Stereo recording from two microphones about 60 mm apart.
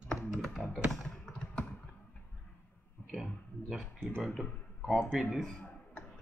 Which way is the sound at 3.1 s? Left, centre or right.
Centre.